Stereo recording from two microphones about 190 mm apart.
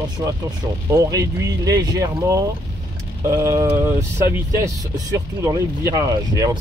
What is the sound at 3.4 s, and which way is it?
Speech, 15° right (ahead or behind).